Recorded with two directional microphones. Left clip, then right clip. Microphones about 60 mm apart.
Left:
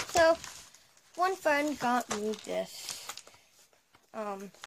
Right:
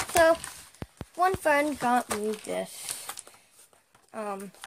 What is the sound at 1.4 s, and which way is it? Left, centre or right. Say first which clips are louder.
Speech: right 4 dB; centre.